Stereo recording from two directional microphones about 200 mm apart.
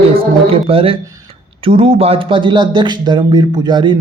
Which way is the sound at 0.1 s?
30° right (ahead or behind).